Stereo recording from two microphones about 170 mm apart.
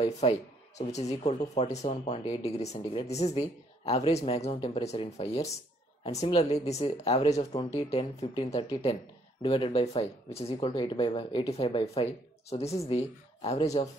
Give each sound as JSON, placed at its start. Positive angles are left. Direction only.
{"t": 0.0, "sound": "speech", "side_deg": 40}
{"t": 9.4, "sound": "speech", "side_deg": 30}